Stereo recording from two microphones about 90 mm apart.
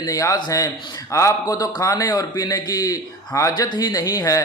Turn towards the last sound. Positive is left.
turn(degrees=45)  # may be behind; listen again after turning